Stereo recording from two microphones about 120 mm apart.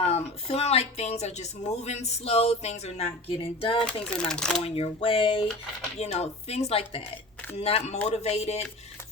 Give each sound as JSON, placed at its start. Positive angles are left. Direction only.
{"t": 0.0, "sound": "a woman's voice", "side_deg": 60}
{"t": 3.8, "sound": "speech", "side_deg": 10}
{"t": 4.6, "sound": "speech", "side_deg": 55}
{"t": 6.0, "sound": "a woman's voice", "side_deg": 60}